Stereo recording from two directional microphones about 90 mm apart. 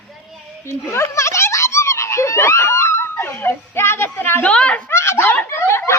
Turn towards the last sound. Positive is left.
turn(degrees=30)  # may be behind; listen again after turning